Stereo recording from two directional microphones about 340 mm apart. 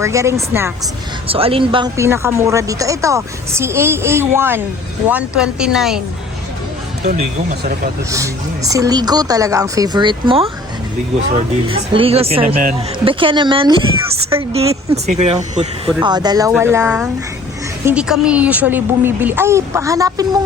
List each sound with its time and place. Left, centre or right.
0.0 s speech: centre
8.1 s speech: centre